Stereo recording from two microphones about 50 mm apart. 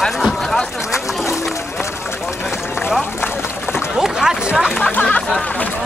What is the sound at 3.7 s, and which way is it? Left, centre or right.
Boat, centre.